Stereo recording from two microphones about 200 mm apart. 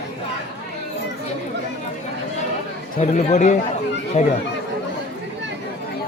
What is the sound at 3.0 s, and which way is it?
Speech, 35° left (ahead or behind).